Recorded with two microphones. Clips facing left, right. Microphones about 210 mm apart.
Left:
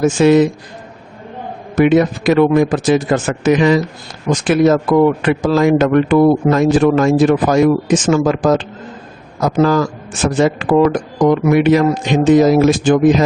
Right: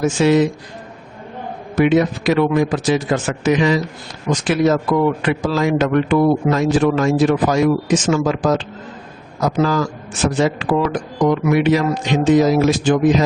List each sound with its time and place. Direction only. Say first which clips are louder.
0.0 s a man's voice: left 4 dB; 50° left (ahead or behind)
1.7 s a man's voice: left 3 dB; 50° left (ahead or behind)